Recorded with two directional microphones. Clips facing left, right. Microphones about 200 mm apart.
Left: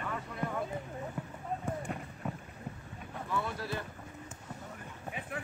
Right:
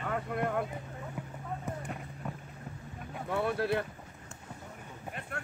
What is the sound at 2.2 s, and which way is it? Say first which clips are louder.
Vehicle: left 2 dB; 5° left (ahead or behind).